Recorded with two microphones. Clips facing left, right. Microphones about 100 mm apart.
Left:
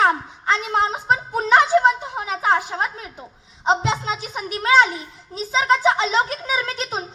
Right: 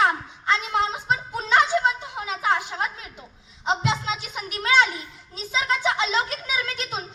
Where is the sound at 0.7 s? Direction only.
40° left (ahead or behind).